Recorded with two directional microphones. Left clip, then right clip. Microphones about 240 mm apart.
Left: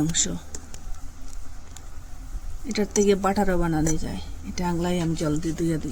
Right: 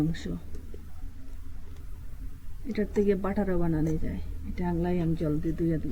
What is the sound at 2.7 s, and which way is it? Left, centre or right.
Speech, left.